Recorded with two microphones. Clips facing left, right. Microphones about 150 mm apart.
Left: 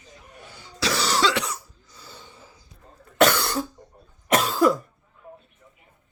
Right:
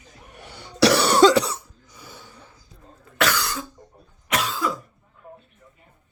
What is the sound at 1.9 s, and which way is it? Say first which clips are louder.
Gasp: right 2 dB; 15° right (ahead or behind).